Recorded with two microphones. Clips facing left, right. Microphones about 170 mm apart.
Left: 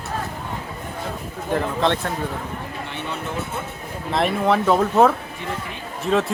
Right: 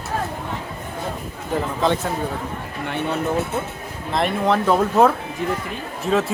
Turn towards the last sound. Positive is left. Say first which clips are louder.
# even
turn(degrees=0)  # may be behind; listen again after turning